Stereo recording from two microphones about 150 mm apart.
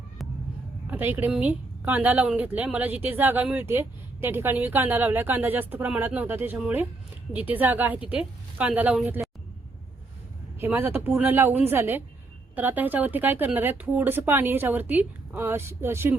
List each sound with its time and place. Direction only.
0.9 s a woman's voice: 15° right (ahead or behind)
10.6 s a woman's voice: 15° right (ahead or behind)